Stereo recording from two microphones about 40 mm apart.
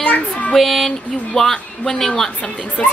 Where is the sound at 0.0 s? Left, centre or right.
Left.